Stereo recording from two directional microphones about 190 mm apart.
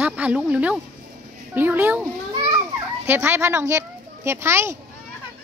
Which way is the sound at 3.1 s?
10° right (ahead or behind).